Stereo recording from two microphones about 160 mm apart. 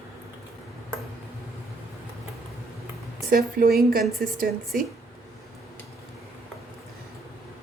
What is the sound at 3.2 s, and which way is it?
A woman's voice, 65° right (ahead or behind).